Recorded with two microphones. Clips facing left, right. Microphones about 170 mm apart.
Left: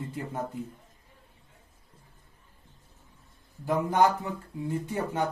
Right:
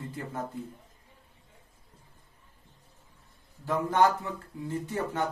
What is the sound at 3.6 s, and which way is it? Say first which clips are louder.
Speech: left 1 dB; 15° left (ahead or behind).